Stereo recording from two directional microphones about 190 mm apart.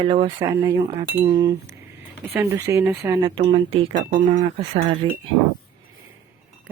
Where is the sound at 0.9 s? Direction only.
30° right (ahead or behind).